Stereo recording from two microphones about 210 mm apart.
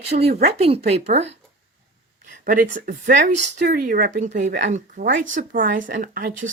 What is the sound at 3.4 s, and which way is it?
Speech, 50° right (ahead or behind).